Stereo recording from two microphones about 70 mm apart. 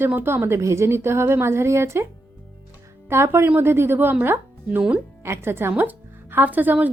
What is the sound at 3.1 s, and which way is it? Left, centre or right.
A woman's voice, right.